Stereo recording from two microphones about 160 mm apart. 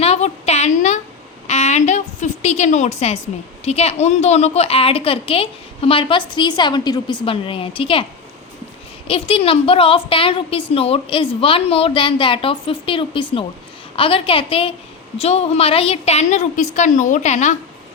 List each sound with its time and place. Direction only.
0.0 s a sound: 40° left (ahead or behind)
3.6 s a woman's voice: 40° left (ahead or behind)
9.0 s a woman's voice: 35° left (ahead or behind)